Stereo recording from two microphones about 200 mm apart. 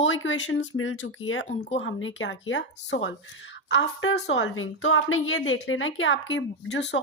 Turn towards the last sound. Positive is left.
turn(degrees=60)  # may be behind; listen again after turning